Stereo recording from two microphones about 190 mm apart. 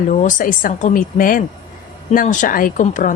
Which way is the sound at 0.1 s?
40° left (ahead or behind).